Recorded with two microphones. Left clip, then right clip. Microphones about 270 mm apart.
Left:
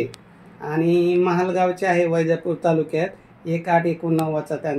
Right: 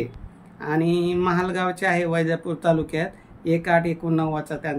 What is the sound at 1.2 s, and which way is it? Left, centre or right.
Mantra, right.